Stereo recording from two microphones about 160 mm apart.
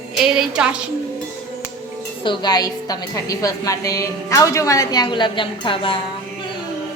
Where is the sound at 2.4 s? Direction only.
25° left (ahead or behind).